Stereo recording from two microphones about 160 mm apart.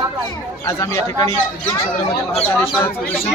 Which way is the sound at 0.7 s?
15° left (ahead or behind).